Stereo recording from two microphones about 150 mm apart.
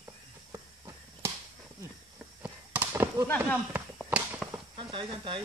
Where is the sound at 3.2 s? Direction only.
10° left (ahead or behind).